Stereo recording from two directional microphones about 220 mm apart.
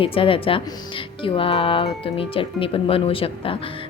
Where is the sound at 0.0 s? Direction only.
25° left (ahead or behind).